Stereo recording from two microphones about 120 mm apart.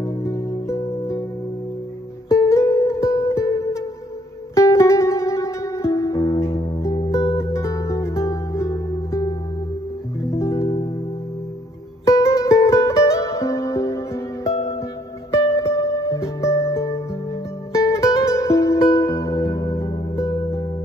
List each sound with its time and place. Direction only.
0.0 s music: 25° left (ahead or behind)
2.2 s music: 25° left (ahead or behind)
10.3 s music: 25° left (ahead or behind)
12.0 s music: 25° left (ahead or behind)